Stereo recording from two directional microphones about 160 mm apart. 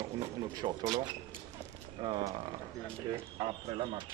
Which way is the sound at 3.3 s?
35° right (ahead or behind).